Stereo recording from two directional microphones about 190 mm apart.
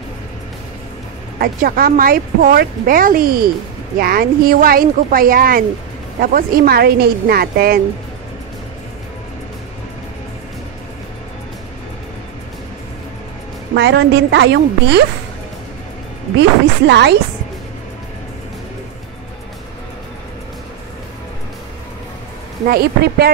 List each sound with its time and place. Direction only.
1.4 s speech: 50° right (ahead or behind)
13.7 s a woman's voice: 65° right (ahead or behind)
16.3 s speech: 65° right (ahead or behind)
22.7 s a woman's voice: 55° right (ahead or behind)